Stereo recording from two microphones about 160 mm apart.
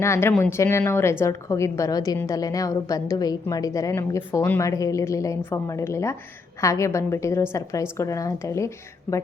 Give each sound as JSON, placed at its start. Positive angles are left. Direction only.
{"t": 0.0, "sound": "a woman's voice", "side_deg": 15}